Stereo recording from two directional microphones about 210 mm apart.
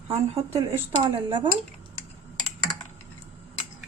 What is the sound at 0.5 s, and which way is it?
Speech, 15° right (ahead or behind).